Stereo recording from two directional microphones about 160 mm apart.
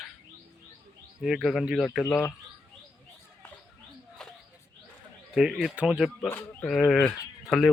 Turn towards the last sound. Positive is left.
turn(degrees=0)  # may be behind; listen again after turning